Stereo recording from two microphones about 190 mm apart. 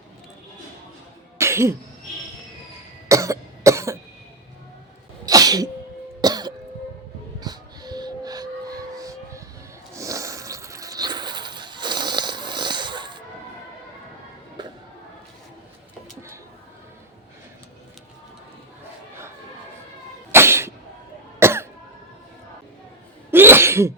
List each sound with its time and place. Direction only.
1.4 s cough: 15° right (ahead or behind)
3.1 s cough: 15° right (ahead or behind)
5.2 s sneeze: 20° right (ahead or behind)
6.2 s cough: 20° right (ahead or behind)
7.3 s music: 20° right (ahead or behind)
9.9 s a sound: 15° right (ahead or behind)
20.3 s cough: 15° right (ahead or behind)
23.3 s sneeze: 10° right (ahead or behind)